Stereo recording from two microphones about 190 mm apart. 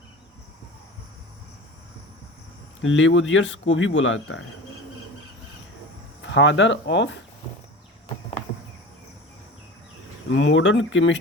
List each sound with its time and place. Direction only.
2.8 s speech: 80° left
6.2 s speech: 70° left (ahead or behind)
10.3 s speech: 75° left (ahead or behind)